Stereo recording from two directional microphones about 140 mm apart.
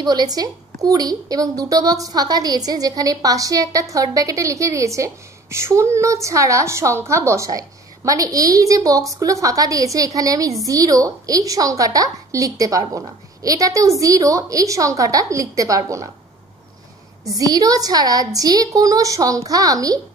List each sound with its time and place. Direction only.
0.0 s a woman's voice: 30° right (ahead or behind)
17.4 s a woman's voice: 25° right (ahead or behind)